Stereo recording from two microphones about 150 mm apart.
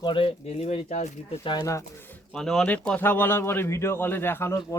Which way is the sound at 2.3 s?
5° left (ahead or behind).